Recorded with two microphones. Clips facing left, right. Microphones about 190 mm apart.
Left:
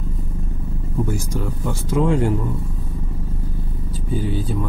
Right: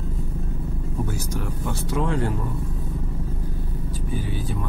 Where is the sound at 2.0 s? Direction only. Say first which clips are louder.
Left 7 dB; 20° left (ahead or behind).